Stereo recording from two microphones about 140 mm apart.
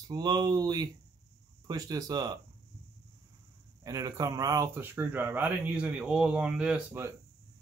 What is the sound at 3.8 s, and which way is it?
Speech, 25° right (ahead or behind).